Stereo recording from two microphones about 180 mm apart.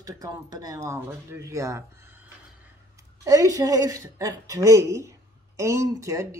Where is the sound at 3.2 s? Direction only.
20° right (ahead or behind).